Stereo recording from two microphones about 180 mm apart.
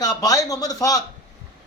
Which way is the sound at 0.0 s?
20° left (ahead or behind).